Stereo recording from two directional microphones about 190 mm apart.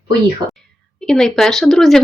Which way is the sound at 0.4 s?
20° right (ahead or behind).